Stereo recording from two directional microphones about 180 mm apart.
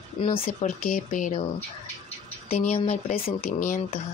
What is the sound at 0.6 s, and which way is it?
Speech, 45° left (ahead or behind).